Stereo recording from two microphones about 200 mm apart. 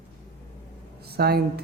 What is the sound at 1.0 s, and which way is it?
Speech, 50° right (ahead or behind).